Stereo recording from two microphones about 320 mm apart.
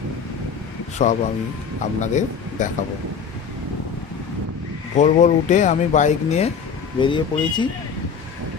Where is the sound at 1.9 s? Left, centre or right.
Left.